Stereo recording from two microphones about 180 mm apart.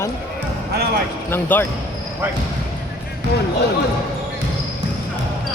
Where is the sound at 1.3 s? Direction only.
10° left (ahead or behind).